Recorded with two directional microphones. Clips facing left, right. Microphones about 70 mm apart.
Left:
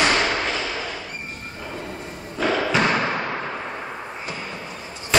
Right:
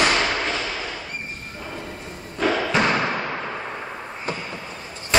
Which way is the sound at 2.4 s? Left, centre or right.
Centre.